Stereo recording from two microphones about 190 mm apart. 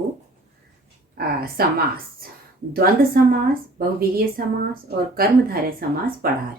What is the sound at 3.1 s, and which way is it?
A woman's voice, 55° right (ahead or behind).